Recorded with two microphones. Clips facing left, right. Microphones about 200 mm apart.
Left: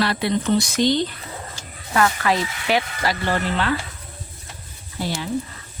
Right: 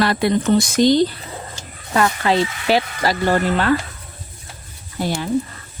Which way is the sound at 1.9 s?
25° right (ahead or behind).